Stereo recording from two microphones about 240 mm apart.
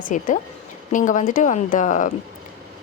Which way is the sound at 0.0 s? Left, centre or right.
Left.